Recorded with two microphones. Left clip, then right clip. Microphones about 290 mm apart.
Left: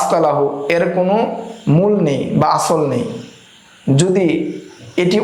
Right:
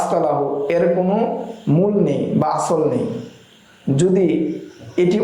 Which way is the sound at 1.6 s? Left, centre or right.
Left.